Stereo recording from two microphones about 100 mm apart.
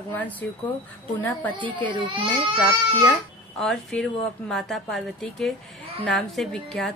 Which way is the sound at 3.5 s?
5° left (ahead or behind).